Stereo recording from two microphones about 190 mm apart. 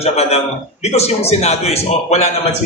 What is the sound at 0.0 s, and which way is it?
A man's voice, 35° left (ahead or behind).